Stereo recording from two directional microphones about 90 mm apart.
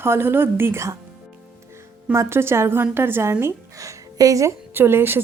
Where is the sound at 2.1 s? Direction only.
25° right (ahead or behind).